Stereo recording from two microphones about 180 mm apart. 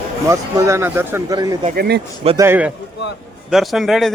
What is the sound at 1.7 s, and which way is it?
Speech, 60° right (ahead or behind).